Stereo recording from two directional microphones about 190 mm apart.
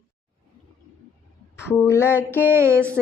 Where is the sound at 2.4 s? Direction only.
10° right (ahead or behind).